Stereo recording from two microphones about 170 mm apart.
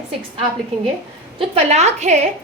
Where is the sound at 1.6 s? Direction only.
40° right (ahead or behind).